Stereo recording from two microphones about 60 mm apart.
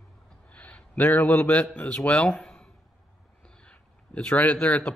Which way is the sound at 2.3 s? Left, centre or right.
Centre.